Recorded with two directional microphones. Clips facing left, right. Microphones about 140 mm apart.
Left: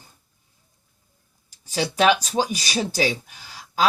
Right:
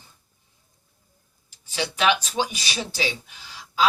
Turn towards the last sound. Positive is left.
turn(degrees=45)  # may be behind; listen again after turning